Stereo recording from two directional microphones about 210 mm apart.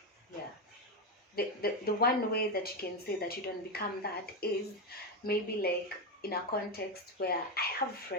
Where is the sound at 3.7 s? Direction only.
50° left (ahead or behind).